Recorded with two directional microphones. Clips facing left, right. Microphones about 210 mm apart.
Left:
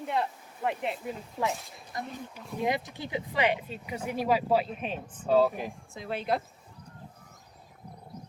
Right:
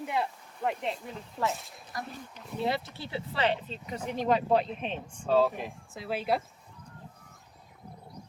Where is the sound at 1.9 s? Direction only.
20° left (ahead or behind); by 6.4 s 5° right (ahead or behind).